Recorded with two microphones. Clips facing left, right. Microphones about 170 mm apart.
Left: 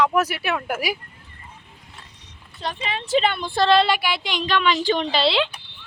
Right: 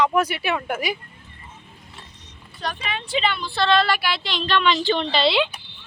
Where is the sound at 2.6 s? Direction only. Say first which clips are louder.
Left 1 dB; 25° left (ahead or behind); by 3.8 s 40° left (ahead or behind).